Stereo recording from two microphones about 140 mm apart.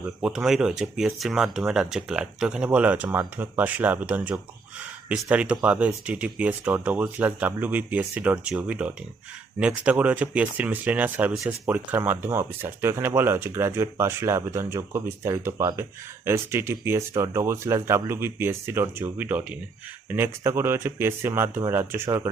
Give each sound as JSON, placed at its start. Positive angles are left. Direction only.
{"t": 0.0, "sound": "speech", "side_deg": -5}